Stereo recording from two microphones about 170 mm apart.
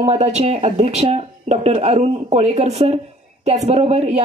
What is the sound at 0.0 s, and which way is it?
Speech, 40° right (ahead or behind).